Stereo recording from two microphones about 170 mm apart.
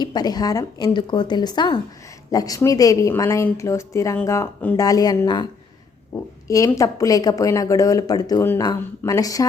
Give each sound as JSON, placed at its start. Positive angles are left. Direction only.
{"t": 0.0, "sound": "speech", "side_deg": 25}
{"t": 6.5, "sound": "speech", "side_deg": 20}